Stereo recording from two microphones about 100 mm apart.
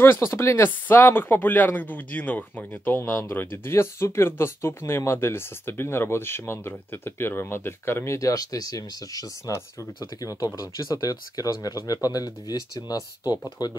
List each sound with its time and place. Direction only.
0.0 s speech: 25° left (ahead or behind)